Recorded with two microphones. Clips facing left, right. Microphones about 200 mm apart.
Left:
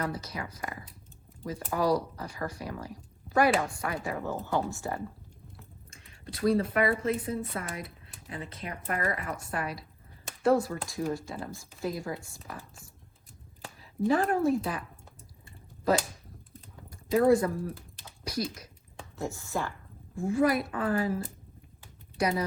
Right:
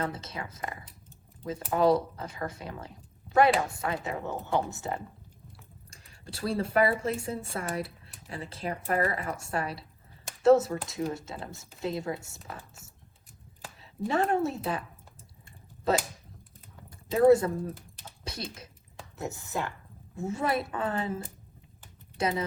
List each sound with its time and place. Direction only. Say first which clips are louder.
0.0 s speech: even; 25° right (ahead or behind)
14.1 s speech: left 2 dB; 25° right (ahead or behind)
15.9 s speech: left 1 dB; 25° right (ahead or behind)
19.2 s speech: left 1 dB; 20° right (ahead or behind)